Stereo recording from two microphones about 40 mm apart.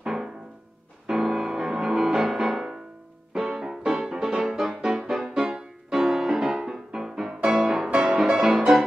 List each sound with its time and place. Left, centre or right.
0.0 s music: centre